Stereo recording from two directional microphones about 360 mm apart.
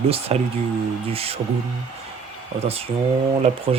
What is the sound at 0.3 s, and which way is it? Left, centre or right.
Speech, centre.